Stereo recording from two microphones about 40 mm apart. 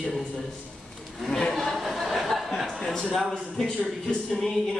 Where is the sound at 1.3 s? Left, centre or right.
Centre.